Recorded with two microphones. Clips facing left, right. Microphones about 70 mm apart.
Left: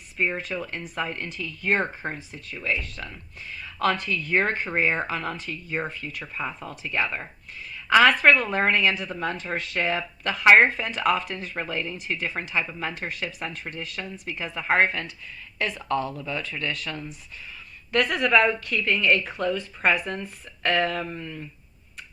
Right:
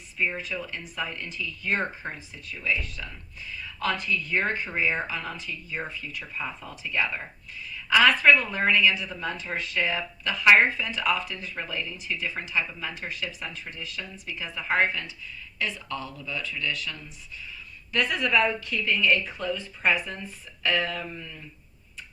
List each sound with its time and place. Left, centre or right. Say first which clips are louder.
0.3 s a woman's voice: left 3 dB; left